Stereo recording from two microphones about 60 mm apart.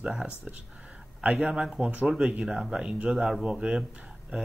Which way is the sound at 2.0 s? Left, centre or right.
Centre.